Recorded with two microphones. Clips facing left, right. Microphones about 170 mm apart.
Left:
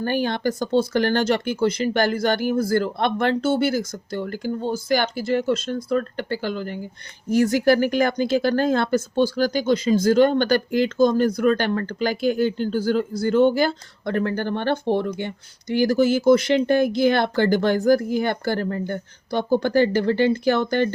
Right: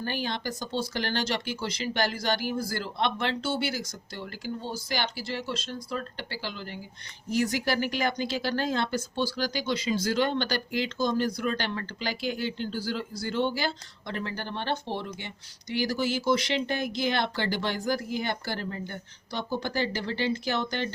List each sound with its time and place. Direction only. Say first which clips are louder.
0.0 s speech: left 9 dB; 50° left (ahead or behind)